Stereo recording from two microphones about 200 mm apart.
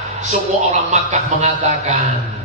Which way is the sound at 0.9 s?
35° right (ahead or behind).